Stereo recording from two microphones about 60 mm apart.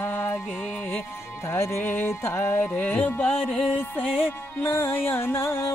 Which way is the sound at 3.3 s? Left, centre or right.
Centre.